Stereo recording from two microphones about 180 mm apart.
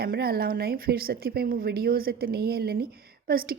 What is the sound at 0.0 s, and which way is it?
A woman's voice, 60° right (ahead or behind).